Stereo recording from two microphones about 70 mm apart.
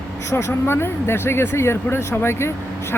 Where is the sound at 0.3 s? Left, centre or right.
Left.